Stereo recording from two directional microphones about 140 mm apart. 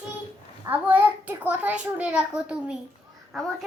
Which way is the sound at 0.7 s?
10° right (ahead or behind).